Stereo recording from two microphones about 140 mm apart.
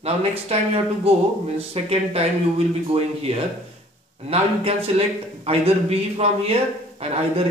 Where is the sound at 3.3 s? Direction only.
45° right (ahead or behind).